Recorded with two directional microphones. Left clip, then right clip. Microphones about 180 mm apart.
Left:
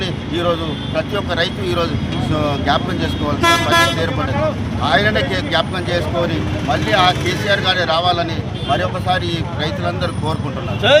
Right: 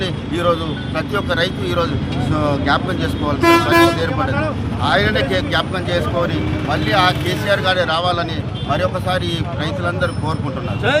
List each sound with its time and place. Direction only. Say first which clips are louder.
0.9 s speech: even; 5° right (ahead or behind)
10.8 s speech: left 5 dB; 45° left (ahead or behind)